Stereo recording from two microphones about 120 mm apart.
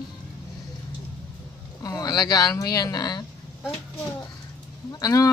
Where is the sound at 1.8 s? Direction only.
30° left (ahead or behind).